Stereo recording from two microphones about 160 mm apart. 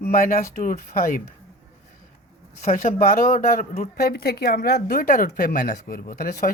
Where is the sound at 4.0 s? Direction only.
75° left (ahead or behind).